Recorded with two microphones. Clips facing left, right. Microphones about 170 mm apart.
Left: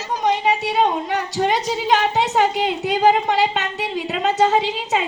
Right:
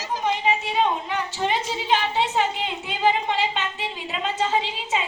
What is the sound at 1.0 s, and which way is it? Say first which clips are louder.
Speech: left 5 dB; 70° left (ahead or behind).